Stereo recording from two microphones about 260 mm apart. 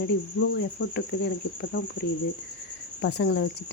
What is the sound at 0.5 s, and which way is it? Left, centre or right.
Speech, left.